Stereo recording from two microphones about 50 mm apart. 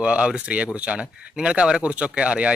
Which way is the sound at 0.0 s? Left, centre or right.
Right.